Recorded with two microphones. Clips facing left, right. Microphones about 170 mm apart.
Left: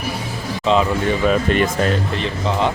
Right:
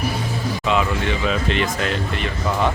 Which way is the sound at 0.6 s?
30° left (ahead or behind).